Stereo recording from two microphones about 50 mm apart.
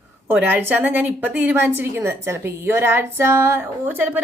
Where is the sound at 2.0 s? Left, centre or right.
Right.